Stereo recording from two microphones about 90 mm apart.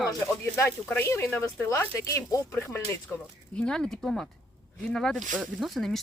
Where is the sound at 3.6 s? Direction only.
5° left (ahead or behind).